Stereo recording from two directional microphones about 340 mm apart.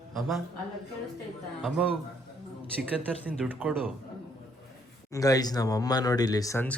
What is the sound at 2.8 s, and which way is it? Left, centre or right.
Speech, centre.